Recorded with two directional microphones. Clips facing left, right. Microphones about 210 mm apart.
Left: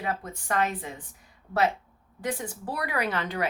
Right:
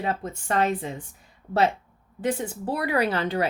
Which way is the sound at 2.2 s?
25° right (ahead or behind).